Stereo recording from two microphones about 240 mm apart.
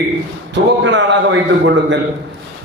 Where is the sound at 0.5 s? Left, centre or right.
Right.